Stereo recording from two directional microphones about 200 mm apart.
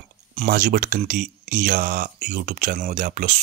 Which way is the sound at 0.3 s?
40° right (ahead or behind).